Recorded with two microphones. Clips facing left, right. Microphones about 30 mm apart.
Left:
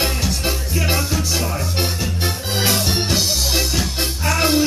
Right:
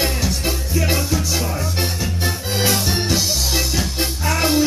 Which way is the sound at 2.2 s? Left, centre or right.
Centre.